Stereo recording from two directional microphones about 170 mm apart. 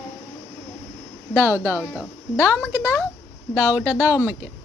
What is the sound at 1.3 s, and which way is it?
Female singing, 10° right (ahead or behind).